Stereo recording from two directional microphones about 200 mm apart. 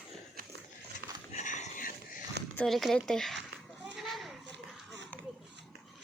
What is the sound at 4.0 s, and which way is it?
Children playing, centre (ahead or behind).